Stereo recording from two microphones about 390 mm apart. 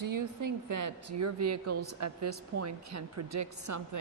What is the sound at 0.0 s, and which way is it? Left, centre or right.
A woman's voice, right.